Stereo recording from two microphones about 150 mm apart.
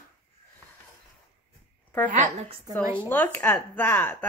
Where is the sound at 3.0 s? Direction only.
10° left (ahead or behind).